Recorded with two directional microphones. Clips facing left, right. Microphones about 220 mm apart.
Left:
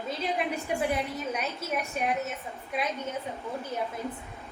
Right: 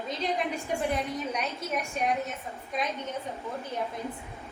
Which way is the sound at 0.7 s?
10° left (ahead or behind).